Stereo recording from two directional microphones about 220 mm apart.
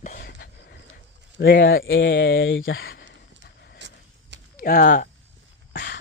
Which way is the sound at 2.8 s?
45° left (ahead or behind).